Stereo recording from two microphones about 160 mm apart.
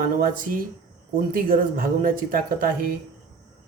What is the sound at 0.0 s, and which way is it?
Speech, 60° right (ahead or behind).